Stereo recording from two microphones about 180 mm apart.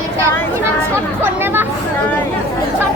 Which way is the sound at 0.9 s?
10° right (ahead or behind).